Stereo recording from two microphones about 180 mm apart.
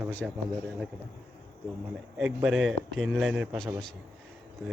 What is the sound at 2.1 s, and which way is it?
Speech, centre (ahead or behind).